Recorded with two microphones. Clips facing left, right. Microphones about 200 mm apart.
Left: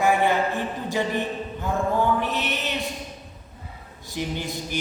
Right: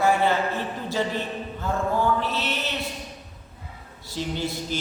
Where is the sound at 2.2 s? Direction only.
15° left (ahead or behind).